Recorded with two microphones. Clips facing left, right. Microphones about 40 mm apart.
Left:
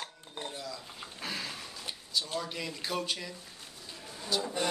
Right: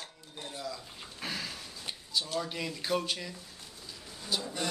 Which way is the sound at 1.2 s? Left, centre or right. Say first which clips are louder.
Even; centre.